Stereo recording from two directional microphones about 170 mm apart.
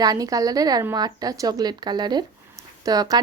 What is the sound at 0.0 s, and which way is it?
Speech, 20° right (ahead or behind).